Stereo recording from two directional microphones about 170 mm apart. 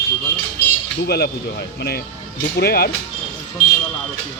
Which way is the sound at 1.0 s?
70° left (ahead or behind).